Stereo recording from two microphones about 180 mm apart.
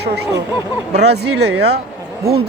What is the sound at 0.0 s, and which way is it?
Speech, 65° right (ahead or behind).